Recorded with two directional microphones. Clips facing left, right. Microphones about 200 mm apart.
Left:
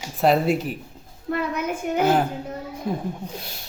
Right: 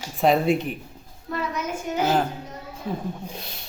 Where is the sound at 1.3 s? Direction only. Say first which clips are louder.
Left 3 dB; 60° left (ahead or behind).